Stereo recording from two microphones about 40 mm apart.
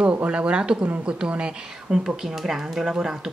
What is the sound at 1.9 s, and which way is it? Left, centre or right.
Speech, centre.